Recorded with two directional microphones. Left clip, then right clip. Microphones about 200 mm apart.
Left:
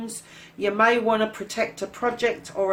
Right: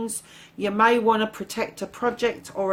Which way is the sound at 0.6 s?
50° right (ahead or behind).